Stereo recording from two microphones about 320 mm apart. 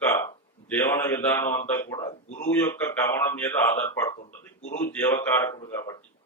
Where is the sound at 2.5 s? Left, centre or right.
Centre.